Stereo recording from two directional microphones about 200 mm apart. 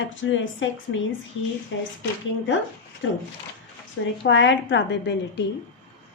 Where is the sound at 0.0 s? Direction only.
70° left (ahead or behind).